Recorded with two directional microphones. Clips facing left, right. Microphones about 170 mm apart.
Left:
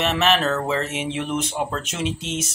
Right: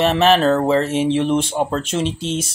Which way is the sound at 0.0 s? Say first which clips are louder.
Right 6 dB; 35° right (ahead or behind).